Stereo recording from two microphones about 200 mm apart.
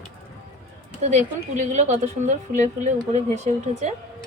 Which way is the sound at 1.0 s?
35° right (ahead or behind).